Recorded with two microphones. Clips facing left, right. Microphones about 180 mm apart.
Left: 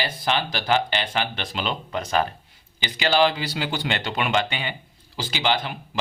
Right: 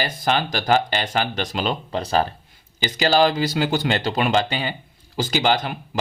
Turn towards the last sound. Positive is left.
turn(degrees=-45)  # may be behind; listen again after turning